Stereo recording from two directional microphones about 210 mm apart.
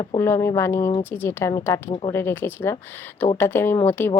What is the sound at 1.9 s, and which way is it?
Speech, 25° left (ahead or behind).